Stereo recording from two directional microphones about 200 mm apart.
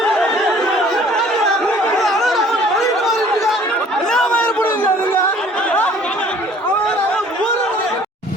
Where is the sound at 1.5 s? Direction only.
Centre (ahead or behind).